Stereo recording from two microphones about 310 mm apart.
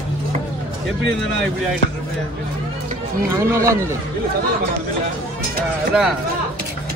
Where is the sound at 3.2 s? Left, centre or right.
Centre.